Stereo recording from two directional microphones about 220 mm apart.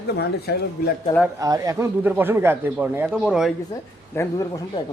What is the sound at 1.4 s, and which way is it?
Speech, 15° right (ahead or behind).